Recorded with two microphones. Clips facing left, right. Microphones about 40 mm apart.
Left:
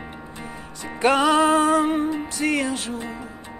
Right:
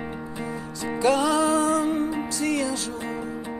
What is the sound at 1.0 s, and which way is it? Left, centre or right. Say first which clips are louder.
Music: left 3 dB; left.